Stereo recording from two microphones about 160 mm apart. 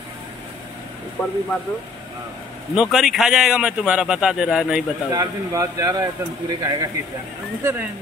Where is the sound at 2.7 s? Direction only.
5° right (ahead or behind).